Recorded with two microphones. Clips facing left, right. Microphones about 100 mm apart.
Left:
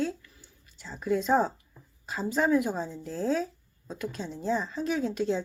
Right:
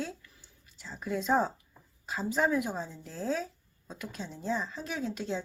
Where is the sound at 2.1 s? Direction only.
10° right (ahead or behind).